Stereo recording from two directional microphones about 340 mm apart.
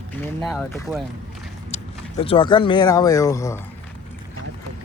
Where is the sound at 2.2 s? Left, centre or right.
Centre.